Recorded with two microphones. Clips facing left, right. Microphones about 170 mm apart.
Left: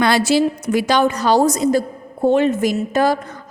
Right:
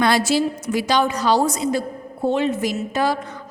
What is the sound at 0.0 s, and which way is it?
A woman's voice, 70° left (ahead or behind).